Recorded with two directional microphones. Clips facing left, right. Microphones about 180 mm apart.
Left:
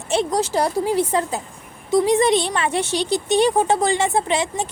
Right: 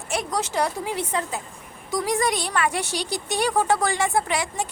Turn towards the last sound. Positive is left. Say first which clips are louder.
# left 4 dB
turn(degrees=25)  # may be behind; listen again after turning